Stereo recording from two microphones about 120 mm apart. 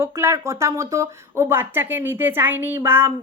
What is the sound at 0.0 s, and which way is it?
A woman's voice, 20° right (ahead or behind).